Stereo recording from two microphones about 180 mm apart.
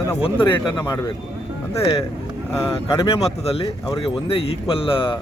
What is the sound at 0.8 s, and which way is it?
Speech, 20° left (ahead or behind).